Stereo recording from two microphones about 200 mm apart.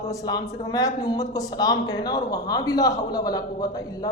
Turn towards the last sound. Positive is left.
turn(degrees=20)  # may be behind; listen again after turning